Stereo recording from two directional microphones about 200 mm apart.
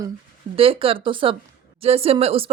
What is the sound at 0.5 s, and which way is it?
Speech, 30° right (ahead or behind).